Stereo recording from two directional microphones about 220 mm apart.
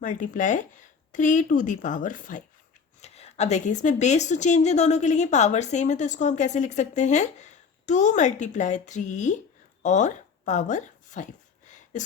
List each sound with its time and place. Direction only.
0.0 s a woman's voice: 35° left (ahead or behind)